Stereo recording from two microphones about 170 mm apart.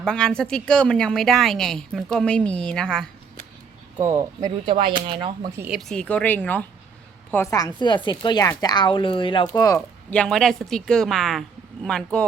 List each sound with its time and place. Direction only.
0.0 s a woman's voice: 5° left (ahead or behind)
4.0 s speech: 15° right (ahead or behind)
4.4 s speech: 30° right (ahead or behind)
5.5 s speech: 10° right (ahead or behind)
5.9 s speech: 5° left (ahead or behind); by 9.5 s 30° left (ahead or behind)
9.6 s speech: 20° left (ahead or behind)
10.1 s a woman's voice: 5° left (ahead or behind)